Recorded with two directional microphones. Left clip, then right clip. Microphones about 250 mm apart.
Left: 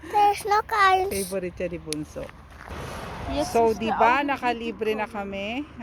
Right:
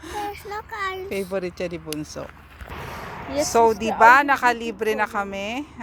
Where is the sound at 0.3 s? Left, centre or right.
Left.